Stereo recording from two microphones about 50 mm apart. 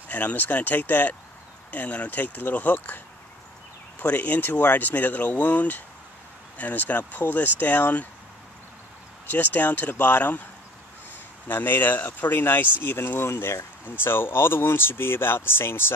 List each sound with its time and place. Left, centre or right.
0.1 s speech: left
4.0 s speech: left
9.3 s speech: left
11.4 s speech: left
13.8 s speech: left